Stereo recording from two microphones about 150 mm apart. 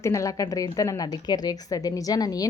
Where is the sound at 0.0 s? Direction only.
20° left (ahead or behind).